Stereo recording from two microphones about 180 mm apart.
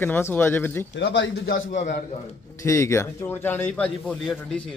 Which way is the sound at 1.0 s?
80° left.